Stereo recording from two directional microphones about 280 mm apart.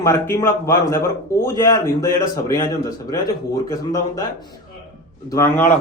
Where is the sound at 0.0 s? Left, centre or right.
Centre.